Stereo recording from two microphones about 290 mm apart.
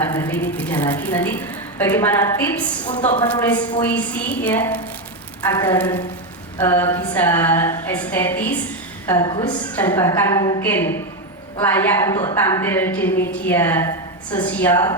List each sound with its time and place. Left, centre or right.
0.0 s a woman's voice: centre
2.8 s a woman's voice: left
3.4 s a woman's voice: centre